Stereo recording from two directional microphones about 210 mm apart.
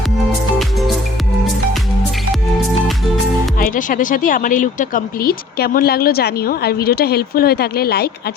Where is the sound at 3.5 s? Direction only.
40° left (ahead or behind).